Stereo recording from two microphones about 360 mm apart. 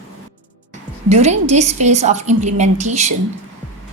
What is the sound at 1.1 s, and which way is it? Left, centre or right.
A woman's voice, centre.